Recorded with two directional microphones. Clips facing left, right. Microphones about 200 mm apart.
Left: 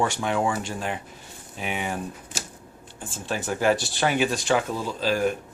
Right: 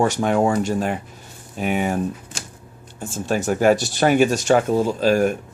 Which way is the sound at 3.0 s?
45° right (ahead or behind).